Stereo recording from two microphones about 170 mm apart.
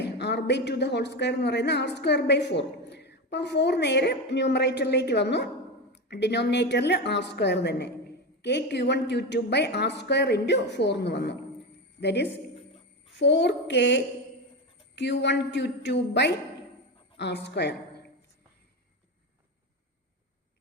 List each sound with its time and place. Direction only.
0.0 s a woman's voice: 90° left